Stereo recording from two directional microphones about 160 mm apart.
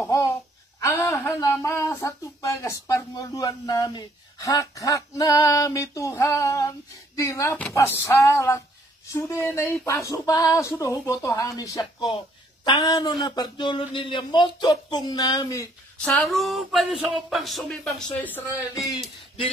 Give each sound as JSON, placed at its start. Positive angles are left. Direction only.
{"t": 0.7, "sound": "a sound", "side_deg": 15}
{"t": 1.1, "sound": "speech", "side_deg": 15}
{"t": 7.2, "sound": "a sound", "side_deg": 20}
{"t": 9.0, "sound": "speech", "side_deg": 15}
{"t": 16.0, "sound": "speech", "side_deg": 5}
{"t": 18.9, "sound": "speech", "side_deg": 35}